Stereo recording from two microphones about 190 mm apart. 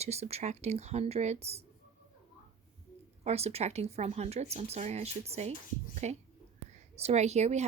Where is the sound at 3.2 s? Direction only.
35° right (ahead or behind).